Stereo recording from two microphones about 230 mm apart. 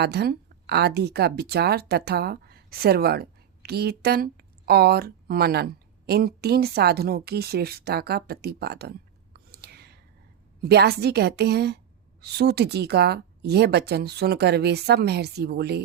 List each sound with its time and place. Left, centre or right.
0.0 s a woman's voice: right